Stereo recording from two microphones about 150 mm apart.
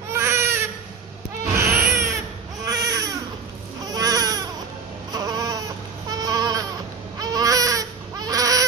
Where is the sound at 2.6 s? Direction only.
25° right (ahead or behind).